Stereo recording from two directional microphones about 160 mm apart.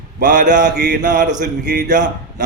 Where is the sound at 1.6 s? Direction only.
90° right.